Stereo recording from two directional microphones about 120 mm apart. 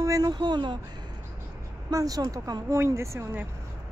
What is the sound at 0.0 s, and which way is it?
Speech, 30° right (ahead or behind).